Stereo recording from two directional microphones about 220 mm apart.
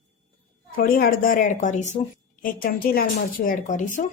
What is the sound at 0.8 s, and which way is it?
A woman's voice, 45° left (ahead or behind).